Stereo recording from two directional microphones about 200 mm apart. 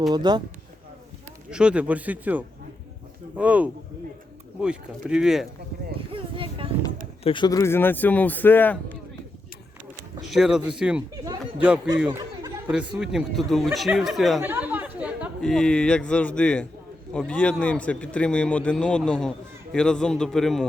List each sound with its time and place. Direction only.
0.1 s speech: 20° right (ahead or behind)
1.5 s a man's voice: 5° right (ahead or behind)
6.1 s a sound: 25° right (ahead or behind)
7.3 s a man's voice: 20° left (ahead or behind)
10.2 s a man's voice: centre (ahead or behind)